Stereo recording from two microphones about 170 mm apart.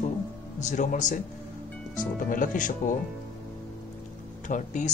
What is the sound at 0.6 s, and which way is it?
Speech, 45° left (ahead or behind).